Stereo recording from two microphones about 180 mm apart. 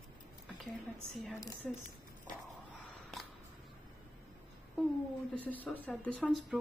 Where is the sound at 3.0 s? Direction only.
Centre (ahead or behind).